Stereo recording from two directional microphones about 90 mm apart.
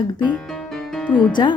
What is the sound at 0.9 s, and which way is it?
Music, 10° left (ahead or behind).